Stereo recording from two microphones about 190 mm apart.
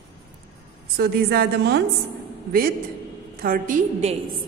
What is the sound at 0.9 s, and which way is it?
Speech, 60° right (ahead or behind).